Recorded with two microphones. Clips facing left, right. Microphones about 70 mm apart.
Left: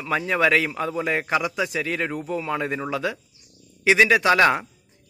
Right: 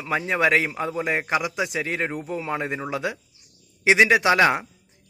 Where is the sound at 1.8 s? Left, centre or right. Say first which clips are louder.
Even; right.